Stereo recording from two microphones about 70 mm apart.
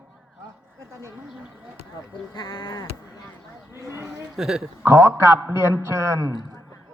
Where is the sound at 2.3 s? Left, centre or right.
Left.